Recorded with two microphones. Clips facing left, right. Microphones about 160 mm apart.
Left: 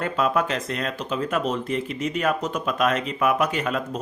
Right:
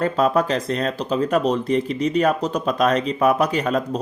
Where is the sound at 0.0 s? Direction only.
35° right (ahead or behind).